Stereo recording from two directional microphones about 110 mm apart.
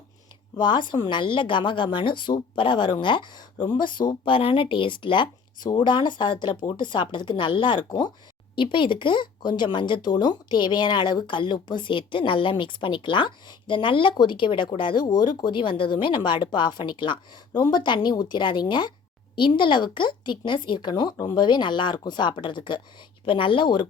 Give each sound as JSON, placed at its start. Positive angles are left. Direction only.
{"t": 0.5, "sound": "speech", "side_deg": 40}